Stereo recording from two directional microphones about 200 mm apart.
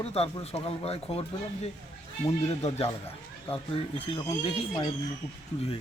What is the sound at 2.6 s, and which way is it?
Speech, 30° left (ahead or behind).